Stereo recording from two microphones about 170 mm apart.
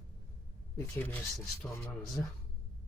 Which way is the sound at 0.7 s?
15° left (ahead or behind).